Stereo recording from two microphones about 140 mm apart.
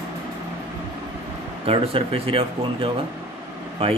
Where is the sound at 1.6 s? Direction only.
40° right (ahead or behind).